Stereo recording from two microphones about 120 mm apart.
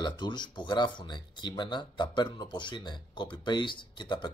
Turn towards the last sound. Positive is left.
turn(degrees=40)  # may be behind; listen again after turning